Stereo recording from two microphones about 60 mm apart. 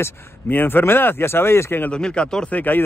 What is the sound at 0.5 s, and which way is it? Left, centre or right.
Speech, left.